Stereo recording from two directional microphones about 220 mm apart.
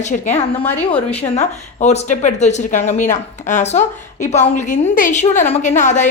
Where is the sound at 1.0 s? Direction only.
30° left (ahead or behind).